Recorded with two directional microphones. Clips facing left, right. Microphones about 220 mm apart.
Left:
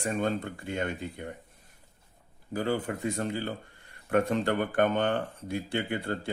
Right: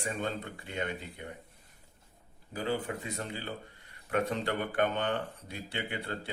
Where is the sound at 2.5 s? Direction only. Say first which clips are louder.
Left 4 dB; 50° left (ahead or behind).